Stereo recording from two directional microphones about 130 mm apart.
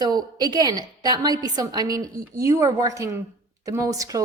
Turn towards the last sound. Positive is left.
turn(degrees=-25)  # may be behind; listen again after turning